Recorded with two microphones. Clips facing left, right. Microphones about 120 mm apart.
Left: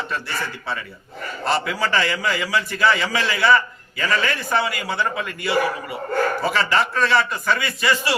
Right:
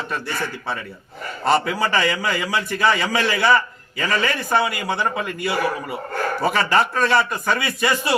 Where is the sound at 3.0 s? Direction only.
50° right (ahead or behind).